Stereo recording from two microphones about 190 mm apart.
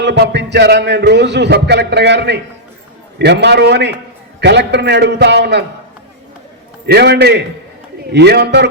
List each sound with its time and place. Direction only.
0.0 s a man's voice: 65° right (ahead or behind)
6.8 s a man's voice: 60° right (ahead or behind)